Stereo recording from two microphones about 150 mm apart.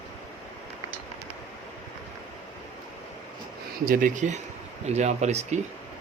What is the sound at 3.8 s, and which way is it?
Speech, 60° right (ahead or behind).